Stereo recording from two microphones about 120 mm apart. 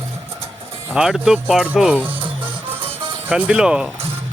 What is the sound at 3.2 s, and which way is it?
Speech, 10° right (ahead or behind).